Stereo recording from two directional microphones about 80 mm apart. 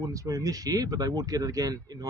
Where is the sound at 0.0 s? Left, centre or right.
Right.